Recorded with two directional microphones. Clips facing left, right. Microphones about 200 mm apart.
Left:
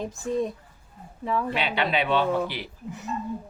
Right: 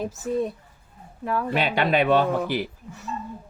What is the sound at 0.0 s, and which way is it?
Speech, 5° right (ahead or behind).